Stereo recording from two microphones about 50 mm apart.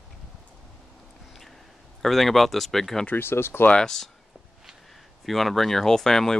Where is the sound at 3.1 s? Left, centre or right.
Left.